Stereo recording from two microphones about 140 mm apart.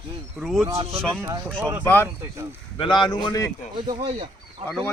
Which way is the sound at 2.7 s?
35° left (ahead or behind).